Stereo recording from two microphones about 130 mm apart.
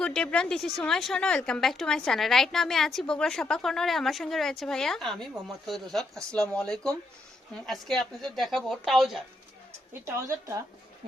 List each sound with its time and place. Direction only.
0.0 s a woman's voice: 5° left (ahead or behind)
10.1 s speech: 25° right (ahead or behind)